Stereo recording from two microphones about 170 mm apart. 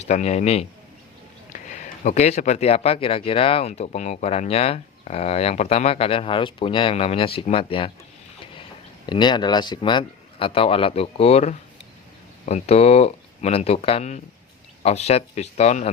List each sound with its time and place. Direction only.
0.1 s speech: 40° left (ahead or behind)
1.7 s speech: 45° left (ahead or behind)
9.0 s speech: 25° left (ahead or behind)